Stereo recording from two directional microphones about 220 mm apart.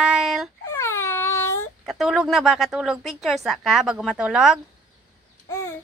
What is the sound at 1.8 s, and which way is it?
Speech, centre (ahead or behind).